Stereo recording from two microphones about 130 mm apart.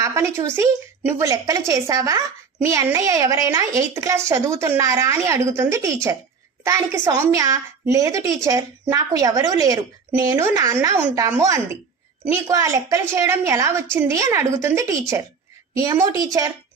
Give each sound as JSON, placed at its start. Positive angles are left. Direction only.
{"t": 0.0, "sound": "a woman's voice", "side_deg": -20}